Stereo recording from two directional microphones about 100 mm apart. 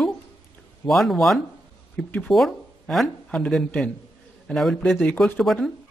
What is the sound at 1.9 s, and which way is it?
Speech, 15° left (ahead or behind).